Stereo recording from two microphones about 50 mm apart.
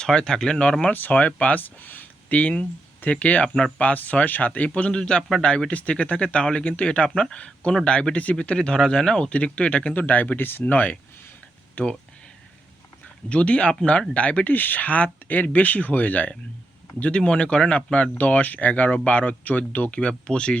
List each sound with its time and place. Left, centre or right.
0.0 s speech: centre
13.2 s speech: left
14.5 s speech: left
17.0 s speech: left
18.1 s speech: left